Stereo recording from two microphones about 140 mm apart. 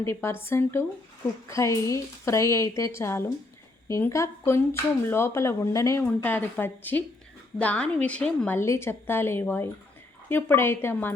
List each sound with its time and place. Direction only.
0.0 s a woman's voice: 20° left (ahead or behind)
8.5 s a woman's voice: 20° left (ahead or behind)